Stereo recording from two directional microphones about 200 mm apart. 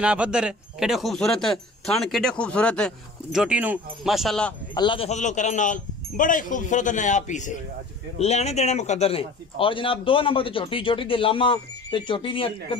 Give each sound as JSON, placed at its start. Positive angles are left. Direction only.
{"t": 0.0, "sound": "speech", "side_deg": -5}
{"t": 4.7, "sound": "a man's voice", "side_deg": 25}